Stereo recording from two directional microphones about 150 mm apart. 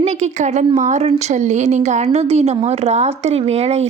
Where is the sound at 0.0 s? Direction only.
50° right (ahead or behind).